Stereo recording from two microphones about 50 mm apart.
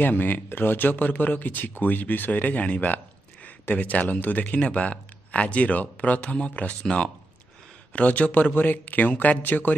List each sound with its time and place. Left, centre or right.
0.0 s speech: left
7.9 s speech: left